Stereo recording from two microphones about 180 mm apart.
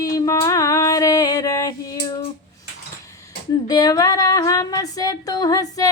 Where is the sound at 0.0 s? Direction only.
15° left (ahead or behind).